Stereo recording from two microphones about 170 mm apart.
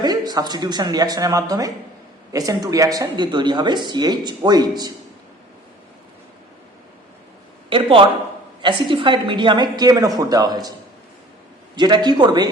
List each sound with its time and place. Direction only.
0.0 s speech: 25° right (ahead or behind)
7.7 s a man's voice: 30° right (ahead or behind)
11.8 s speech: 25° right (ahead or behind)